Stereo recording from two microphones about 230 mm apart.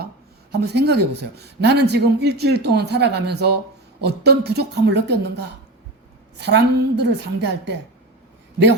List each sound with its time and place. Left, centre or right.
0.5 s speech: right